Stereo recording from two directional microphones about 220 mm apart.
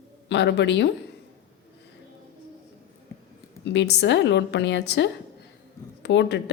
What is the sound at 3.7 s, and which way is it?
Speech, 50° left (ahead or behind).